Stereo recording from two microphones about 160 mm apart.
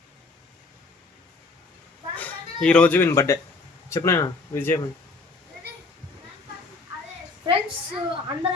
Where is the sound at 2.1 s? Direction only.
10° left (ahead or behind).